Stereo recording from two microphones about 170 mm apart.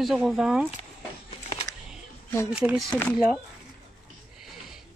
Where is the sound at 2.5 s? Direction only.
5° right (ahead or behind).